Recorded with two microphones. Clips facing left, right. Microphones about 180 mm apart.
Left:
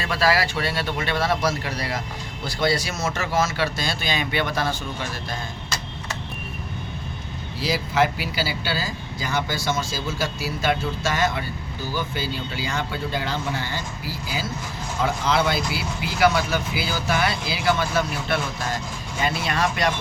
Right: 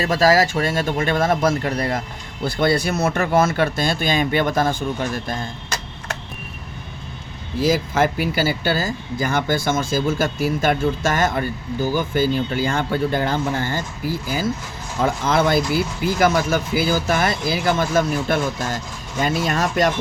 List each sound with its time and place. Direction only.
0.0 s speech: 40° right (ahead or behind)
7.6 s speech: 50° right (ahead or behind)